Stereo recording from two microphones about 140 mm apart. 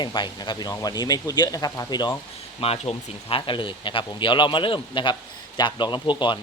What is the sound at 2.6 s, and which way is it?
Speech, 45° left (ahead or behind).